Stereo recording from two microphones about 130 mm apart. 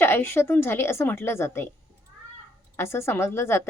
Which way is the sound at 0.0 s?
20° left (ahead or behind).